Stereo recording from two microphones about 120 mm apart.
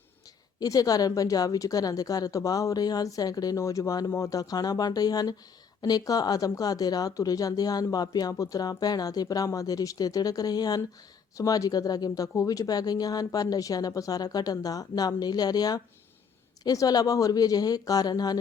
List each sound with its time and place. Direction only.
0.6 s speech: 30° left (ahead or behind)